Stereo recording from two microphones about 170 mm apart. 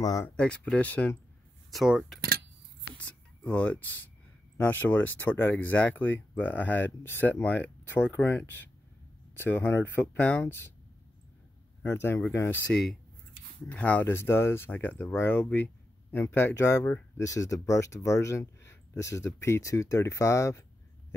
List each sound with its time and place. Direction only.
0.0 s speech: 20° left (ahead or behind)
0.4 s speech: 5° left (ahead or behind)
1.7 s speech: centre (ahead or behind)
3.0 s speech: 10° left (ahead or behind)
11.8 s speech: 15° left (ahead or behind)
13.7 s speech: 10° left (ahead or behind)